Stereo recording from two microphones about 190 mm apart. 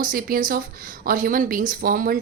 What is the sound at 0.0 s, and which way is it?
A woman's voice, 45° right (ahead or behind).